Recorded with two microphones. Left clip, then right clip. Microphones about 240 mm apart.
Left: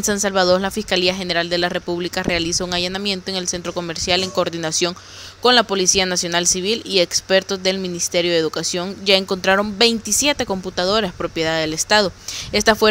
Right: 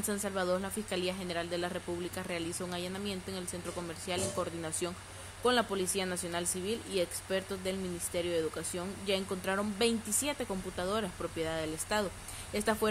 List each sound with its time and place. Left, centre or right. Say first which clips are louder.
0.0 s speech: left 17 dB; left